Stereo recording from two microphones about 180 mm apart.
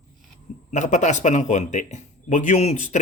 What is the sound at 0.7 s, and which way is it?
Speech, 40° left (ahead or behind).